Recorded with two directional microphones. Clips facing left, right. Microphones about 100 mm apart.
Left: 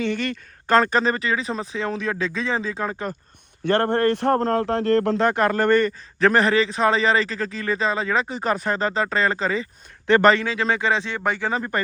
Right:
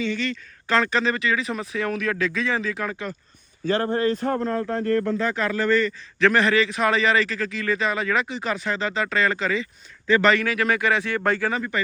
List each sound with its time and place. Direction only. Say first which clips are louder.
0.0 s a man's voice: left 2 dB; 55° left (ahead or behind); by 2.9 s 30° left (ahead or behind)
3.6 s a man's voice: left 3 dB; 65° left (ahead or behind); by 11.6 s 20° left (ahead or behind)